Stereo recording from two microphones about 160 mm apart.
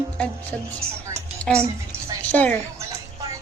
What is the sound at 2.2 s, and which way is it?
Speech, 10° left (ahead or behind).